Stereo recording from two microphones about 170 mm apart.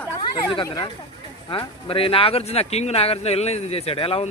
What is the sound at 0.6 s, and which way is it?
Speech, 20° left (ahead or behind).